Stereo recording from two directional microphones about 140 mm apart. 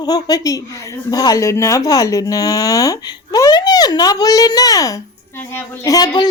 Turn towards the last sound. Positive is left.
turn(degrees=30)  # may be behind; listen again after turning